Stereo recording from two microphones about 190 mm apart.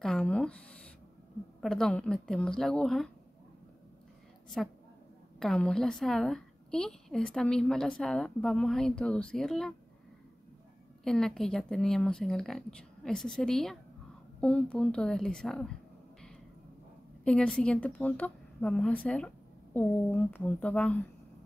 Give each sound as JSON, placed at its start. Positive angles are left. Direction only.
{"t": 0.0, "sound": "a woman's voice", "side_deg": 5}
{"t": 5.4, "sound": "a woman's voice", "side_deg": 5}
{"t": 11.1, "sound": "a woman's voice", "side_deg": 5}
{"t": 17.2, "sound": "a woman's voice", "side_deg": 5}